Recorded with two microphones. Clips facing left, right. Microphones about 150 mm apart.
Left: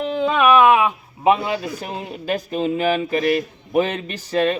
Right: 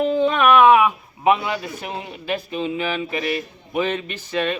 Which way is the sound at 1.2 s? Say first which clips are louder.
Left 1 dB; 35° left (ahead or behind).